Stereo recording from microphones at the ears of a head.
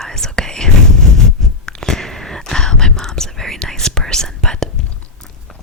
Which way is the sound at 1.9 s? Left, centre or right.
Centre.